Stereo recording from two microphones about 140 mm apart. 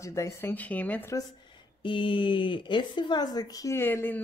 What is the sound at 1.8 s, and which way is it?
Speech, 35° left (ahead or behind).